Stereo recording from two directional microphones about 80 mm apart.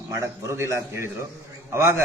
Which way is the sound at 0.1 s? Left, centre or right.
Right.